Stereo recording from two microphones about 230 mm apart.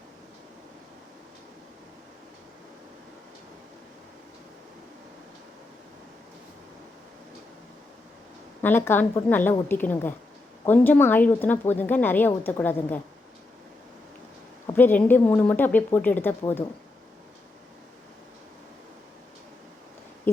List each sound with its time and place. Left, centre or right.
8.6 s a woman's voice: centre
14.7 s a woman's voice: centre
20.3 s a sound: centre